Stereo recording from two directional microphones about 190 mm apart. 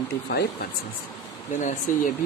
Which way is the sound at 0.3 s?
55° left (ahead or behind).